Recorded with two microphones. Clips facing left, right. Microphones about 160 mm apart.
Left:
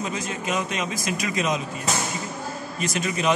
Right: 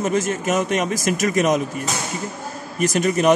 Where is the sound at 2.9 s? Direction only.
45° right (ahead or behind).